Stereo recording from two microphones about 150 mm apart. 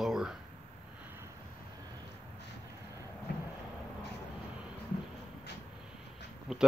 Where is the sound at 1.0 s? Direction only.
15° right (ahead or behind).